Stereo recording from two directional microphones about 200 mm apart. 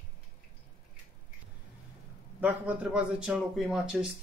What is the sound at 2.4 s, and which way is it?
Speech, 10° right (ahead or behind).